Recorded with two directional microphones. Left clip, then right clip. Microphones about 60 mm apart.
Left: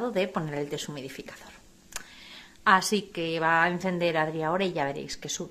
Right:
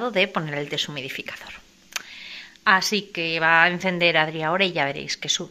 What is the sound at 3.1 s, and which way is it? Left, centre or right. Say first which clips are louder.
Speech: right 7 dB; left.